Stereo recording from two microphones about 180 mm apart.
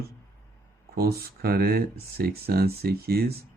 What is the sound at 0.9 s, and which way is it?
Speech, 60° right (ahead or behind).